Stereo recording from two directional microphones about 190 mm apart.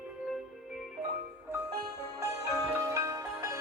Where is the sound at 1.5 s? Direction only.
15° right (ahead or behind).